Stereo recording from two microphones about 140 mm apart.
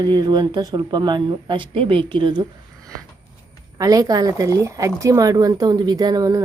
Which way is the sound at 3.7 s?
25° right (ahead or behind).